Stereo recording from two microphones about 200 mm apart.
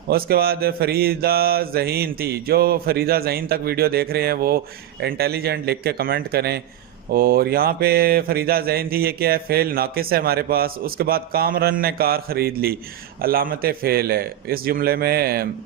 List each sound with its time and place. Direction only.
0.1 s mantra: 50° right (ahead or behind)